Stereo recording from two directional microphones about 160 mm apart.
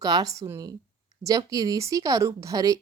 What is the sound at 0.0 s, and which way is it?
Speech, 25° right (ahead or behind).